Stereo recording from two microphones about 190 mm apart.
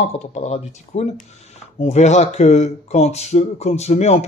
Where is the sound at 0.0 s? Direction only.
35° left (ahead or behind).